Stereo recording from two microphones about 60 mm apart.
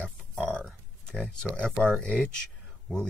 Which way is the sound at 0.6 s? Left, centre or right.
Centre.